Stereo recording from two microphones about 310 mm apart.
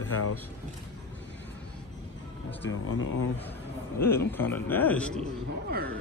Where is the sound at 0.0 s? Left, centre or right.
Left.